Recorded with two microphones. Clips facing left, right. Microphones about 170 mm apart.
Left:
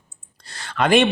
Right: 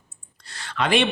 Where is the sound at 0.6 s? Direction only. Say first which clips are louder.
Left 5 dB; 45° left (ahead or behind).